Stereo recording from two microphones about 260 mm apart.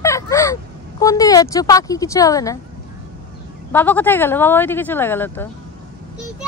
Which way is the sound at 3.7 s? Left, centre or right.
Centre.